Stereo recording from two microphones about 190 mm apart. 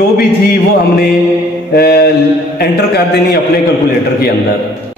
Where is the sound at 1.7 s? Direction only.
55° left (ahead or behind).